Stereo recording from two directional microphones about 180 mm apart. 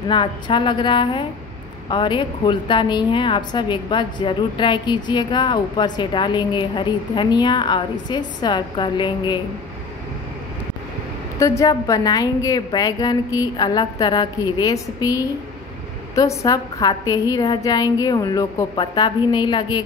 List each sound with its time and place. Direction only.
0.1 s a woman's voice: 25° left (ahead or behind)
11.3 s a woman's voice: 15° left (ahead or behind)